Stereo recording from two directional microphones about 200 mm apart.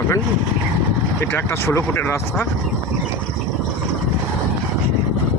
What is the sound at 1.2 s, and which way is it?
Speech, 10° left (ahead or behind).